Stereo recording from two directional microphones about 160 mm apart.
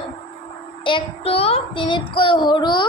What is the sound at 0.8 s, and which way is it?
Child singing, 35° left (ahead or behind).